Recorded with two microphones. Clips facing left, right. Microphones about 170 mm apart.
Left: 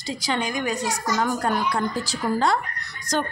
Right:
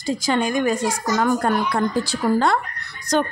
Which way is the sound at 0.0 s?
50° right (ahead or behind).